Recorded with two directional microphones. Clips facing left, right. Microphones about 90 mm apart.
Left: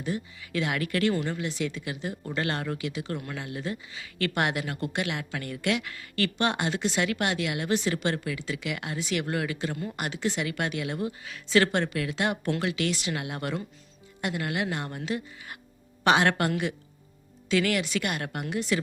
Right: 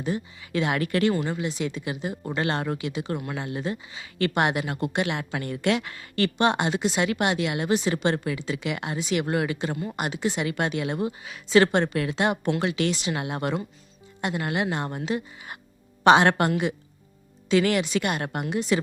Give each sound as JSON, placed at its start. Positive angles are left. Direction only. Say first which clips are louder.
{"t": 0.0, "sound": "speech", "louder": "right 3 dB", "side_deg": -25}
{"t": 17.5, "sound": "speech", "louder": "right 4 dB", "side_deg": -25}